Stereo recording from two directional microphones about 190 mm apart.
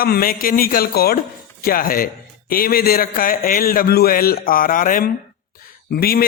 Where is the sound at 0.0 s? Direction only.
50° left (ahead or behind).